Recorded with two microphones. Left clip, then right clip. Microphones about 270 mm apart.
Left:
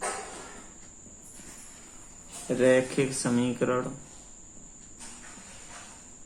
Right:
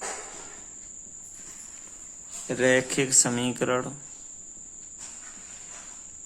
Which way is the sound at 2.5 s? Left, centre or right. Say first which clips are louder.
Even; right.